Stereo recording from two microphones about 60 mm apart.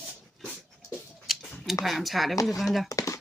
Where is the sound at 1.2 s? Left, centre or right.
Centre.